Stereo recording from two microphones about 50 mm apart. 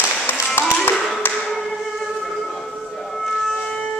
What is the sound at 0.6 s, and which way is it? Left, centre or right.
Clapping, left.